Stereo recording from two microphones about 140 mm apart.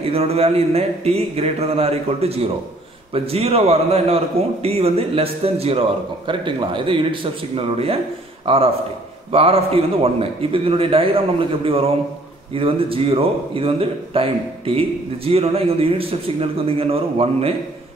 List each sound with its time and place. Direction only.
0.0 s a man's voice: 45° right (ahead or behind)
9.3 s a man's voice: 45° right (ahead or behind)